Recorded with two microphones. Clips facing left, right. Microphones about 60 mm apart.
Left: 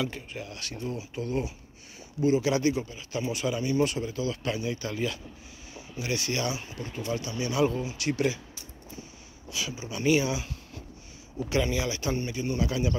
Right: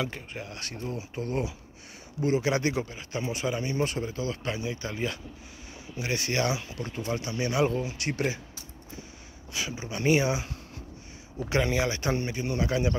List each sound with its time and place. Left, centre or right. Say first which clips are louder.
0.0 s speech: left 1 dB; right
4.5 s speech: left 2 dB; right
5.9 s speech: right 1 dB; right
6.4 s speech: right 3 dB; right
7.1 s speech: right 1 dB; right
9.5 s speech: right 1 dB; right